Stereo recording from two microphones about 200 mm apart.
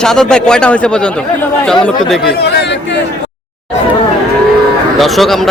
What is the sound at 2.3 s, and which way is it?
Speech, 60° left (ahead or behind).